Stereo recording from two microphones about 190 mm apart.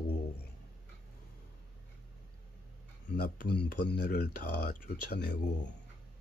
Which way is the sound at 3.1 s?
55° left (ahead or behind).